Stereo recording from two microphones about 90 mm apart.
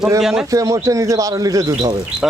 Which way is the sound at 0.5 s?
40° right (ahead or behind).